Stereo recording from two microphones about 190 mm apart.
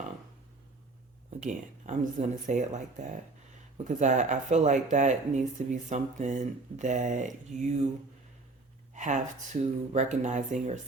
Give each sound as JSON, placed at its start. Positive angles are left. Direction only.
{"t": 1.5, "sound": "speech", "side_deg": -40}
{"t": 9.0, "sound": "speech", "side_deg": -40}